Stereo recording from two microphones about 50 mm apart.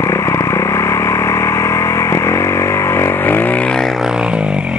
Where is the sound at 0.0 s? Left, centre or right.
Left.